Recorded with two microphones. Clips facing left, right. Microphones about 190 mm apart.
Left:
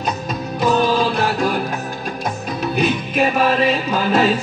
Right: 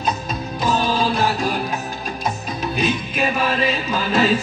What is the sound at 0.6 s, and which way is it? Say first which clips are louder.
Music: left 4 dB; 60° left (ahead or behind).